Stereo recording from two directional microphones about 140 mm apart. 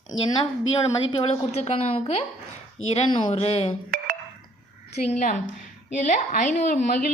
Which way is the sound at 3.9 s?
90° right.